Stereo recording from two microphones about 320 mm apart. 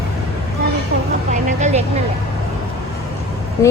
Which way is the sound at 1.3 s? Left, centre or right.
Right.